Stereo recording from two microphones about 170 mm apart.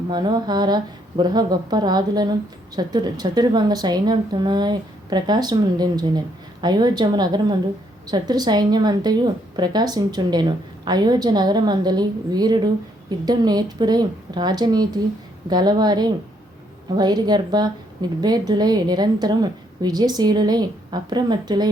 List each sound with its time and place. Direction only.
0.1 s a woman's voice: 25° right (ahead or behind)